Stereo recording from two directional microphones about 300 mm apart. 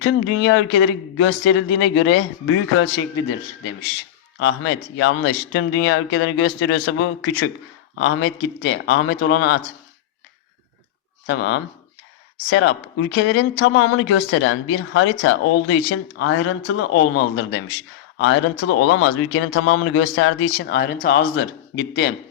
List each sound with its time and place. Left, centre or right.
0.0 s speech: left
4.4 s speech: left
11.3 s speech: left
18.6 s speech: left